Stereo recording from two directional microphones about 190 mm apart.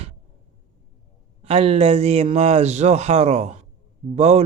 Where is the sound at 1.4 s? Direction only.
30° right (ahead or behind).